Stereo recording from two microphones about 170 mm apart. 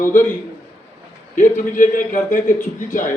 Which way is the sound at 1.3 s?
50° left (ahead or behind).